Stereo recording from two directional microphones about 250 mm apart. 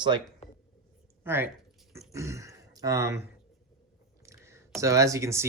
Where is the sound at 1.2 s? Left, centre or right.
Centre.